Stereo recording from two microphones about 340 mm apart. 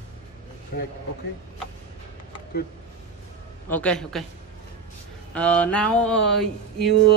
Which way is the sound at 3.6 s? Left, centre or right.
Centre.